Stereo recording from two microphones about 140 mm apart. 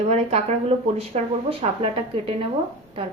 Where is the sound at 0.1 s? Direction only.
50° right (ahead or behind).